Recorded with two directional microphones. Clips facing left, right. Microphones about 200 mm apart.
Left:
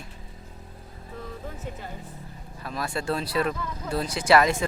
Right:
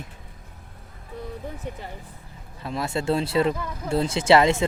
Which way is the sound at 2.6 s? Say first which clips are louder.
Right 4 dB; 25° right (ahead or behind).